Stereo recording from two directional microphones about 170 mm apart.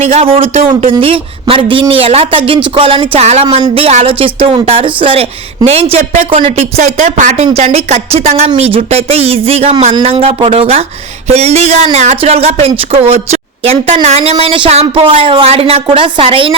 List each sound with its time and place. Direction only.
0.0 s a woman's voice: 40° right (ahead or behind)